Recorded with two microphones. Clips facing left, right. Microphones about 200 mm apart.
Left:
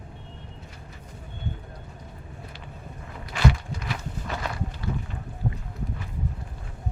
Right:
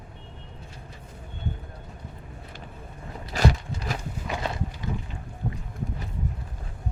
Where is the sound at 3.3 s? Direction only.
40° right (ahead or behind).